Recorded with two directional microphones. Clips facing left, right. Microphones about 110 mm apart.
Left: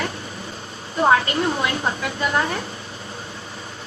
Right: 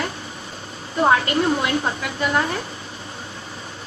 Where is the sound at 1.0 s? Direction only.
25° left (ahead or behind).